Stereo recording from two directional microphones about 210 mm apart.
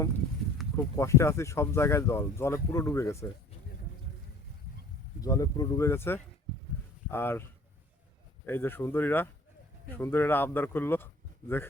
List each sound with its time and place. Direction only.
0.8 s speech: 15° left (ahead or behind)
5.2 s speech: 15° left (ahead or behind)
8.4 s speech: 10° left (ahead or behind)